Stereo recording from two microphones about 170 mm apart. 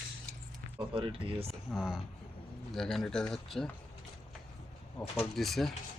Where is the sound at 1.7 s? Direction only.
5° right (ahead or behind).